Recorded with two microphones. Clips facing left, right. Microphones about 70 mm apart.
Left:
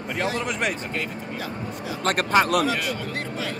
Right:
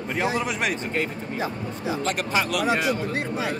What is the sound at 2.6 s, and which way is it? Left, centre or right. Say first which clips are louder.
Speech: right 2 dB; right.